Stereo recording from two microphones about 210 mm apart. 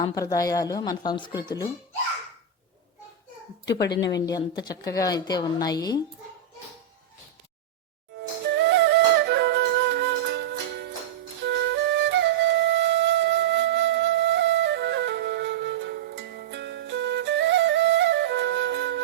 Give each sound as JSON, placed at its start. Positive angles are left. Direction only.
{"t": 0.0, "sound": "speech", "side_deg": 15}
{"t": 3.7, "sound": "a woman's voice", "side_deg": 50}
{"t": 4.3, "sound": "speech", "side_deg": 20}
{"t": 8.5, "sound": "music", "side_deg": -55}
{"t": 11.4, "sound": "flute", "side_deg": -60}